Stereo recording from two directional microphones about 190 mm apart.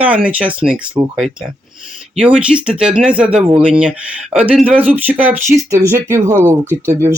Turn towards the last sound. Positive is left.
turn(degrees=-15)  # may be behind; listen again after turning